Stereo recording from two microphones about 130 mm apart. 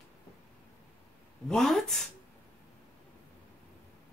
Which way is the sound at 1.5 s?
5° left (ahead or behind).